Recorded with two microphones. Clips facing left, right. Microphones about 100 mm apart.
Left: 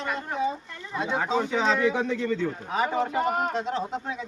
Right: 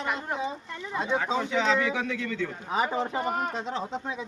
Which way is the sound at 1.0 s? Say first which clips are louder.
Left 2 dB; 15° left (ahead or behind).